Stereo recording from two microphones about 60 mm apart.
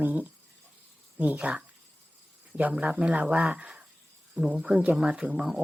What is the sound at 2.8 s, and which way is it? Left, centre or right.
Speech, right.